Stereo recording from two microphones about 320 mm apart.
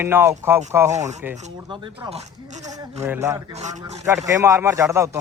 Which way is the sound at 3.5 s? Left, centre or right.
Centre.